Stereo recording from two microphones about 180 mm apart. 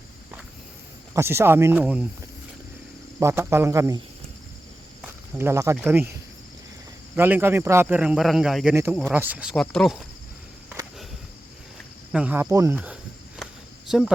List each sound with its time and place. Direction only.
1.1 s a man's voice: 15° right (ahead or behind)
3.2 s a man's voice: 15° right (ahead or behind)
5.0 s snake: 15° right (ahead or behind)
5.8 s a man's voice: 10° right (ahead or behind)
7.2 s a man's voice: 10° right (ahead or behind)
8.7 s a man's voice: 15° right (ahead or behind)
12.1 s cricket: 10° right (ahead or behind)
13.9 s a woman's voice: 5° right (ahead or behind)